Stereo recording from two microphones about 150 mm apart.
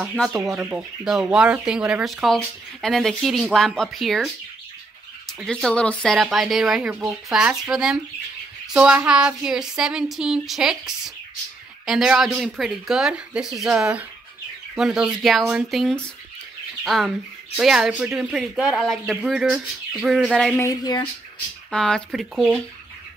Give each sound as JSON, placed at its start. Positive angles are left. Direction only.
{"t": 0.1, "sound": "speech", "side_deg": 5}
{"t": 0.6, "sound": "speech", "side_deg": -10}
{"t": 5.4, "sound": "speech", "side_deg": 5}
{"t": 20.5, "sound": "speech", "side_deg": 25}
{"t": 21.6, "sound": "speech", "side_deg": 5}
{"t": 22.3, "sound": "speech", "side_deg": -10}